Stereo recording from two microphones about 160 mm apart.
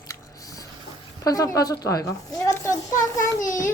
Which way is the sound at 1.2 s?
20° left (ahead or behind).